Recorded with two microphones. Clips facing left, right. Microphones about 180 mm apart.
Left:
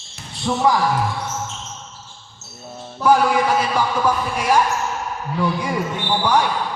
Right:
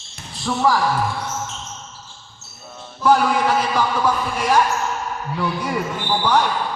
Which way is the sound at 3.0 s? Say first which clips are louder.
Left 1 dB; 10° left (ahead or behind).